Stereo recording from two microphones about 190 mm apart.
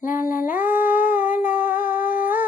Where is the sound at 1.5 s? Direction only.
45° left (ahead or behind).